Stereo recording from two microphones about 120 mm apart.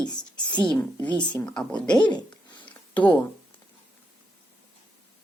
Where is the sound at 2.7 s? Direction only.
10° left (ahead or behind).